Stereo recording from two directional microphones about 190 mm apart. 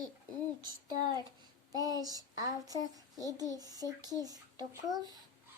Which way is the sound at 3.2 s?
20° right (ahead or behind).